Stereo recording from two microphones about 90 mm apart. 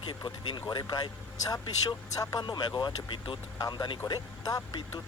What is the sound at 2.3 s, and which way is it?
Speech, 50° left (ahead or behind).